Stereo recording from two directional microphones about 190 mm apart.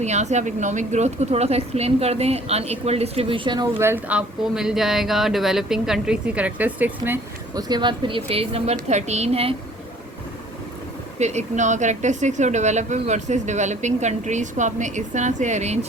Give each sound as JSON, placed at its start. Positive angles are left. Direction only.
{"t": 0.0, "sound": "speech", "side_deg": -35}
{"t": 3.8, "sound": "speech", "side_deg": -10}
{"t": 7.7, "sound": "speech", "side_deg": -25}
{"t": 11.2, "sound": "speech", "side_deg": -35}